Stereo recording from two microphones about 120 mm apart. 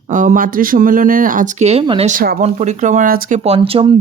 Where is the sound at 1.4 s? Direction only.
85° right.